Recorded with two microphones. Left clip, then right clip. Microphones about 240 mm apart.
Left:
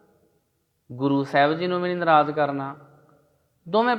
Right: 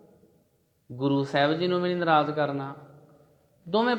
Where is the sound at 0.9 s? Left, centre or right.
Left.